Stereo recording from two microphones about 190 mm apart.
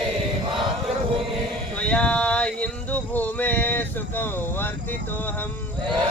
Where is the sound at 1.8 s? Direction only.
5° left (ahead or behind).